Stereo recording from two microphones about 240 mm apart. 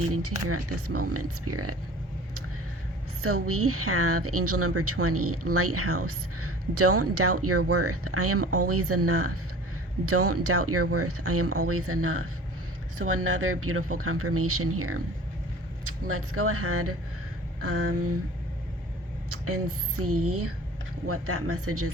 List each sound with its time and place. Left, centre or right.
0.1 s speech: right
3.2 s speech: right
16.0 s speech: right
19.3 s speech: right